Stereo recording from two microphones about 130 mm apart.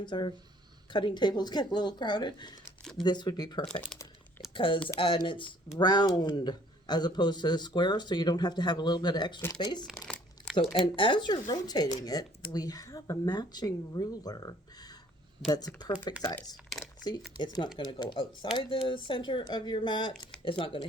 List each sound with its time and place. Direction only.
0.0 s speech: 35° left (ahead or behind)
4.5 s speech: 40° left (ahead or behind)
10.1 s crumpling: 5° left (ahead or behind)
10.6 s speech: 40° left (ahead or behind)
17.3 s speech: 35° left (ahead or behind)